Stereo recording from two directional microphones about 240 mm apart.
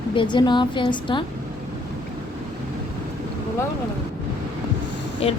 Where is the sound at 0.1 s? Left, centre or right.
Centre.